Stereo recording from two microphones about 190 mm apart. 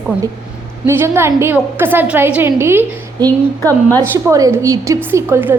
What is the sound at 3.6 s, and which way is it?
Speech, 10° left (ahead or behind).